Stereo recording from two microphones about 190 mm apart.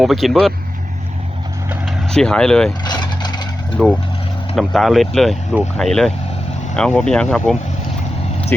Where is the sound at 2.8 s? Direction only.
20° left (ahead or behind).